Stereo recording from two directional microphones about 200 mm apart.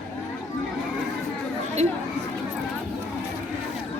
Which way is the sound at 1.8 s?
35° right (ahead or behind).